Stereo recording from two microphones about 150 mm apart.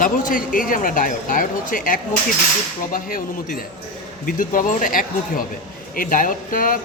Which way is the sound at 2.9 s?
70° left (ahead or behind).